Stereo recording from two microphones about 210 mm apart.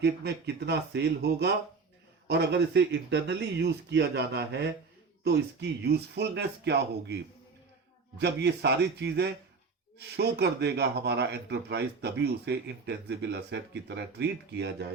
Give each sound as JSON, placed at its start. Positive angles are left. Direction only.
{"t": 0.0, "sound": "speech", "side_deg": -50}
{"t": 8.2, "sound": "speech", "side_deg": -50}